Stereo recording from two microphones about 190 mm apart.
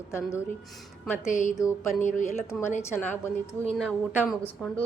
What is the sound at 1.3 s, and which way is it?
Speech, 40° left (ahead or behind).